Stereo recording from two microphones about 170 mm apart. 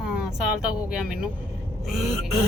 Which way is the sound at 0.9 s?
5° right (ahead or behind).